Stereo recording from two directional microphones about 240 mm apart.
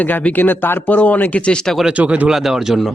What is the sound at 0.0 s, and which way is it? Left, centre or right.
Speech, centre.